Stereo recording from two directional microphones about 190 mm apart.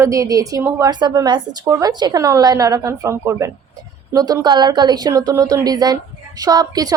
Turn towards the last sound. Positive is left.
turn(degrees=-20)  # may be behind; listen again after turning